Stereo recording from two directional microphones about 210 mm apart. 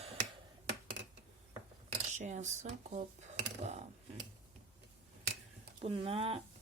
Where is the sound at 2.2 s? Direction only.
35° right (ahead or behind).